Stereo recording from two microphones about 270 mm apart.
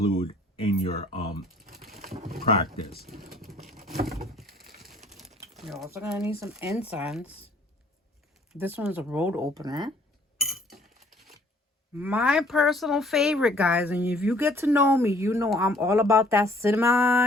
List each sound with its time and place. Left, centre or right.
0.0 s speech: left
1.9 s a sound: right
2.4 s speech: left
3.2 s vehicle: centre
4.4 s pigeon: right
5.6 s speech: centre
8.5 s speech: centre
10.4 s chink: centre
11.9 s speech: centre